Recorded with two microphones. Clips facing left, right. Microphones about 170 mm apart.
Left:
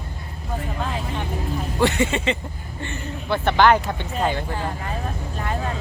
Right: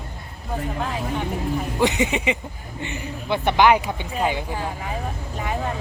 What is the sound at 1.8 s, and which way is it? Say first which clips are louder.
Speech: left 1 dB; 15° right (ahead or behind).